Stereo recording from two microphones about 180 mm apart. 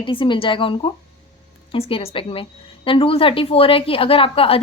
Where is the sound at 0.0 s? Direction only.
30° left (ahead or behind).